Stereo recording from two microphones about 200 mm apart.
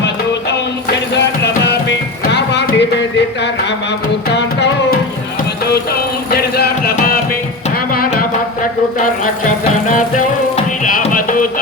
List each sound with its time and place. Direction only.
1.1 s music: 60° left (ahead or behind)
4.4 s music: 60° left (ahead or behind)
6.3 s music: 50° left (ahead or behind)
9.8 s music: 40° left (ahead or behind)